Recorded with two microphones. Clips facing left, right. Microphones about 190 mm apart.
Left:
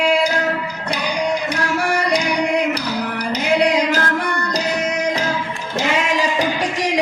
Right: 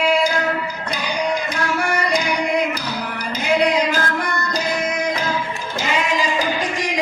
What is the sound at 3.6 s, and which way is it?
Music, 75° left (ahead or behind).